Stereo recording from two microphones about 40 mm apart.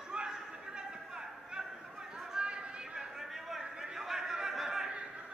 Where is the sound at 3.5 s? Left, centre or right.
Centre.